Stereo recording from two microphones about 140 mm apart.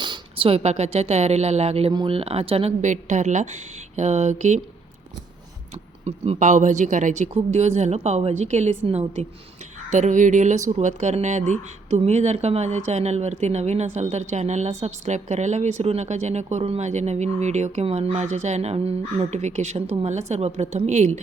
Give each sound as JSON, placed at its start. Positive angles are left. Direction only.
{"t": 0.0, "sound": "speech", "side_deg": -35}
{"t": 1.9, "sound": "speech", "side_deg": -35}
{"t": 2.8, "sound": "speech", "side_deg": -60}
{"t": 6.1, "sound": "speech", "side_deg": -55}